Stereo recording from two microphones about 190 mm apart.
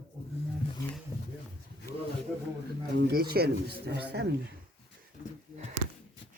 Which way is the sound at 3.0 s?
60° right (ahead or behind).